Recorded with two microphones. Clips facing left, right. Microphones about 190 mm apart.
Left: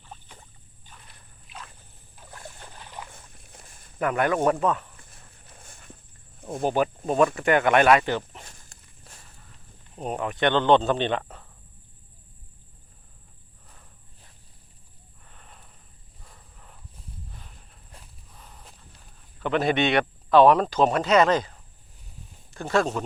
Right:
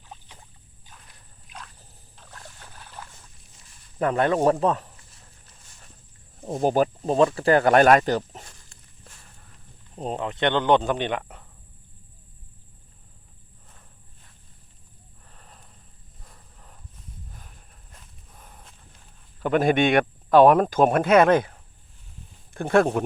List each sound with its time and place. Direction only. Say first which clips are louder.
0.0 s boat: even; 10° right (ahead or behind)
2.1 s boat: left 3 dB; 10° left (ahead or behind)
3.3 s walk: left 6 dB; 60° left (ahead or behind)
4.0 s speech: right 2 dB; 30° right (ahead or behind)
4.9 s a sound: left 2 dB; 55° left (ahead or behind)
6.4 s speech: right 3 dB; 35° right (ahead or behind)
10.0 s speech: even; 25° right (ahead or behind)
15.3 s a sound: even; 35° right (ahead or behind)
19.4 s speech: right 3 dB; 45° right (ahead or behind)
22.5 s speech: right 4 dB; 55° right (ahead or behind)